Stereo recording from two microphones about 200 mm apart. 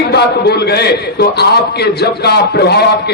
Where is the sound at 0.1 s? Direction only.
55° left (ahead or behind).